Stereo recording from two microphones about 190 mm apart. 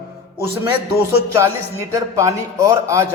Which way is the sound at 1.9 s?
15° right (ahead or behind).